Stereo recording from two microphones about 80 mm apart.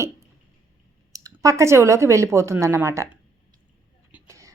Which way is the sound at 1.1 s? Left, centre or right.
Right.